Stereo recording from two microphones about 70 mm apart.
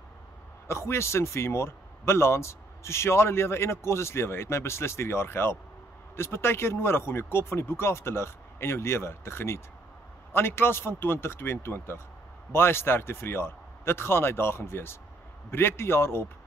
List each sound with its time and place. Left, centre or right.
0.7 s speech: left